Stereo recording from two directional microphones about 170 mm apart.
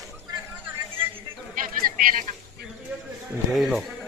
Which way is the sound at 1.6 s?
55° right (ahead or behind).